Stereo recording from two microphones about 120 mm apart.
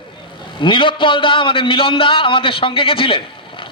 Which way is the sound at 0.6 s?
45° left (ahead or behind).